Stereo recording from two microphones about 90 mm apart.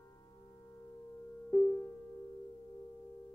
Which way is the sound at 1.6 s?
25° left (ahead or behind).